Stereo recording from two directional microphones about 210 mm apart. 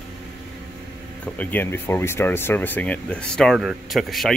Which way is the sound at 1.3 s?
10° left (ahead or behind).